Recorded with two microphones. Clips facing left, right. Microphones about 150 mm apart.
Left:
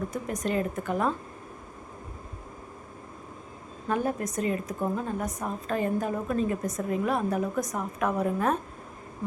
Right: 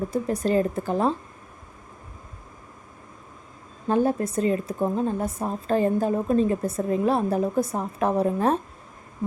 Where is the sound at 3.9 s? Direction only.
30° right (ahead or behind).